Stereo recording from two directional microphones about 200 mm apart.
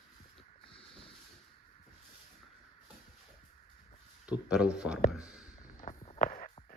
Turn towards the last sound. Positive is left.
turn(degrees=35)  # may be behind; listen again after turning